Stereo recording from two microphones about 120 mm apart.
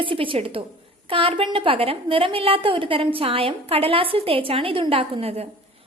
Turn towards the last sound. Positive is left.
turn(degrees=-55)  # may be behind; listen again after turning